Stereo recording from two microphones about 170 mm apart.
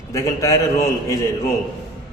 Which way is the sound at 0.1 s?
20° left (ahead or behind).